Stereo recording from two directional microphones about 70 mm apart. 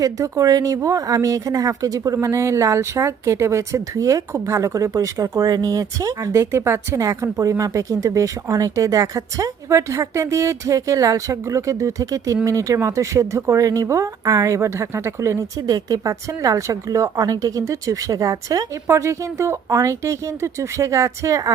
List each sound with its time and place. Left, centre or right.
0.0 s speech: right
2.1 s speech: right